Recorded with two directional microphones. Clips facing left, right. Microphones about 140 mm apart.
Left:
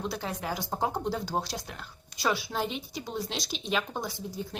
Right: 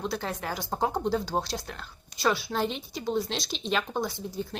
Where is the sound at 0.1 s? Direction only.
10° left (ahead or behind).